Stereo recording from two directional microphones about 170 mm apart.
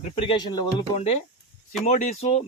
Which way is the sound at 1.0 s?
40° left (ahead or behind).